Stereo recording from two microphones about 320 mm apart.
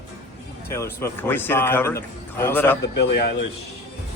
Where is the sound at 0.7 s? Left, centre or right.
Centre.